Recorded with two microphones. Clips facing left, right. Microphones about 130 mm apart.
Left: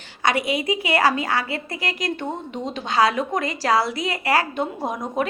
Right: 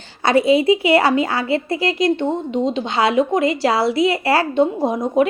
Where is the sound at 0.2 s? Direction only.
30° right (ahead or behind).